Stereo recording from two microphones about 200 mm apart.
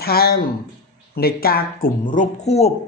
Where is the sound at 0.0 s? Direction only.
50° left (ahead or behind).